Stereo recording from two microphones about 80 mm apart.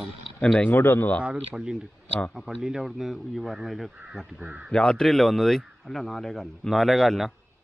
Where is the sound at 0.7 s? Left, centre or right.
Left.